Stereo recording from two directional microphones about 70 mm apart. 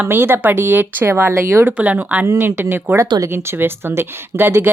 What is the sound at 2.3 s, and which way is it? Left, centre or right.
A woman's voice, right.